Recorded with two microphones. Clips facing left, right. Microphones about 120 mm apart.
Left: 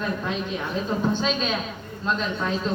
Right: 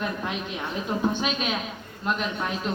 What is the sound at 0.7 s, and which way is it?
A woman's voice, 15° right (ahead or behind).